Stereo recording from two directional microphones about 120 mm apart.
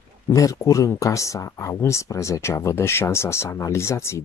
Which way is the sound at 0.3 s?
25° left (ahead or behind).